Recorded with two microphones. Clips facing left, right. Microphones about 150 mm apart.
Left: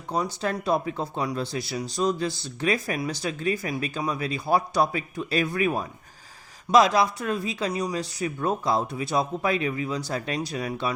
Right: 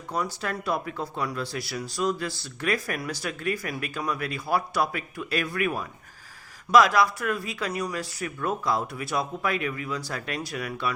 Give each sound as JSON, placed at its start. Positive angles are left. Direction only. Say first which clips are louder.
{"t": 0.4, "sound": "speech", "louder": "left 4 dB", "side_deg": 25}